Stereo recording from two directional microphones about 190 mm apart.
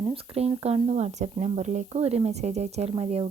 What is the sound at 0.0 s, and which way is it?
Speech, 30° right (ahead or behind).